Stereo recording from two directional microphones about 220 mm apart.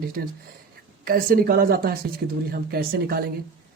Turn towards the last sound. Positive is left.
turn(degrees=-45)  # may be behind; listen again after turning